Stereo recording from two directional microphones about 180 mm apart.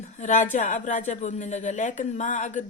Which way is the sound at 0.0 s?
40° left (ahead or behind).